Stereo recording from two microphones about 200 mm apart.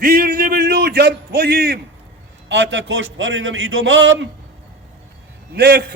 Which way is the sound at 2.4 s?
65° right (ahead or behind).